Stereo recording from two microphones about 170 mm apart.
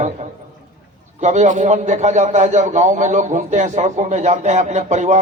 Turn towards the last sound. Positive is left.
turn(degrees=-45)  # may be behind; listen again after turning